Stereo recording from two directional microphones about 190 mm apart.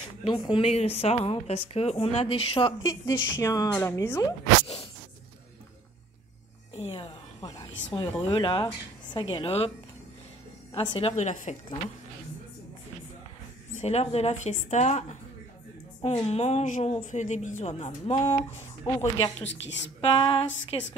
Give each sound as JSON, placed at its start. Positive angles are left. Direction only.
{"t": 0.2, "sound": "a woman's voice", "side_deg": 25}
{"t": 2.8, "sound": "speech", "side_deg": 15}
{"t": 6.8, "sound": "a woman's voice", "side_deg": 25}
{"t": 10.7, "sound": "a woman's voice", "side_deg": 30}
{"t": 13.7, "sound": "a woman's voice", "side_deg": 35}
{"t": 18.9, "sound": "speech", "side_deg": 20}
{"t": 19.4, "sound": "a woman's voice", "side_deg": 70}
{"t": 20.0, "sound": "a woman's voice", "side_deg": 30}